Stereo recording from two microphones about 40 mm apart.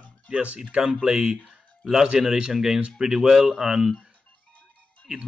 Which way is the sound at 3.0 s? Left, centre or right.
Centre.